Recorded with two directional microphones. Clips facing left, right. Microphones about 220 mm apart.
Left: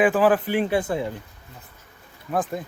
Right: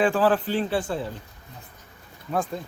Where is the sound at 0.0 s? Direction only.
10° left (ahead or behind).